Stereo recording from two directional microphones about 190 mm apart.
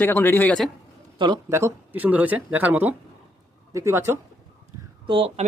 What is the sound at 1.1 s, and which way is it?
Speech, 25° right (ahead or behind).